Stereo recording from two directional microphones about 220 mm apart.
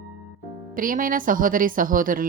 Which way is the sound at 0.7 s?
40° right (ahead or behind).